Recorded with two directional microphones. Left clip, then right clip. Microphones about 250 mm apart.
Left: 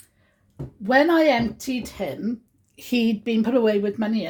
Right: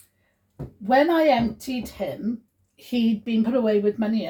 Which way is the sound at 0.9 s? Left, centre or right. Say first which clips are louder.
Left 1 dB; left.